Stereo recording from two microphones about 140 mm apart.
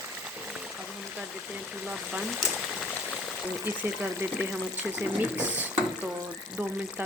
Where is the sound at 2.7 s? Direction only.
5° left (ahead or behind).